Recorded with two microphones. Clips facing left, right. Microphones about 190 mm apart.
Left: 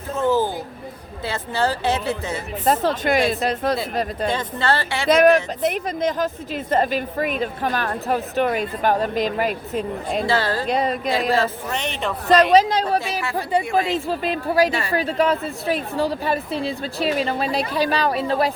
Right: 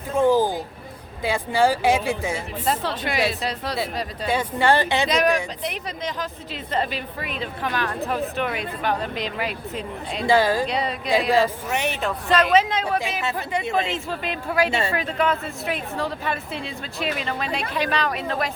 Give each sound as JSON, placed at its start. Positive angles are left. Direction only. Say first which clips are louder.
{"t": 0.2, "sound": "a woman's voice", "louder": "right 2 dB", "side_deg": -10}
{"t": 2.6, "sound": "speech", "louder": "left 7 dB", "side_deg": 45}
{"t": 4.3, "sound": "a woman's voice", "louder": "right 7 dB", "side_deg": -10}
{"t": 5.0, "sound": "speech", "louder": "left 6 dB", "side_deg": 50}
{"t": 10.2, "sound": "a woman's voice", "louder": "right 6 dB", "side_deg": -15}
{"t": 10.7, "sound": "speech", "louder": "left 5 dB", "side_deg": 45}
{"t": 11.3, "sound": "a woman's voice", "louder": "right 1 dB", "side_deg": -15}
{"t": 12.3, "sound": "a woman's voice", "louder": "left 5 dB", "side_deg": 40}
{"t": 13.6, "sound": "speech", "louder": "left 3 dB", "side_deg": -25}
{"t": 13.9, "sound": "a woman's voice", "louder": "left 5 dB", "side_deg": 35}
{"t": 14.7, "sound": "speech", "louder": "right 1 dB", "side_deg": -25}
{"t": 14.9, "sound": "a woman's voice", "louder": "left 4 dB", "side_deg": 35}